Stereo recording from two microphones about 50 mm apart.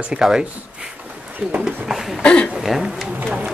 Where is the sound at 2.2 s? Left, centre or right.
Left.